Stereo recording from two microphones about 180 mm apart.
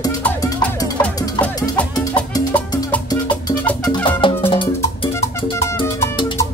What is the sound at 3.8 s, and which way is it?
Music, 25° left (ahead or behind).